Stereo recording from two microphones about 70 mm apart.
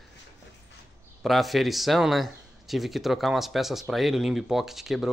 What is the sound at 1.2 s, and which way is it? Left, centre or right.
Speech, centre.